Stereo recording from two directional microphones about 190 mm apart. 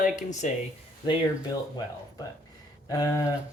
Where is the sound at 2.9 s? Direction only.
20° left (ahead or behind).